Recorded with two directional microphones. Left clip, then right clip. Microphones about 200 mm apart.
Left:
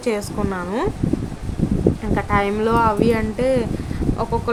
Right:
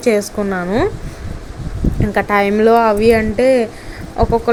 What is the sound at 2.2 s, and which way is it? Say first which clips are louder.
Speech: right 10 dB; 20° right (ahead or behind).